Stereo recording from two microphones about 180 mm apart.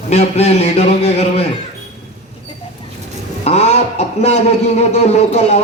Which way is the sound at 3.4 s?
35° left (ahead or behind).